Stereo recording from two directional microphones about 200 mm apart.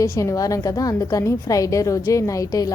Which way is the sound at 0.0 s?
15° left (ahead or behind).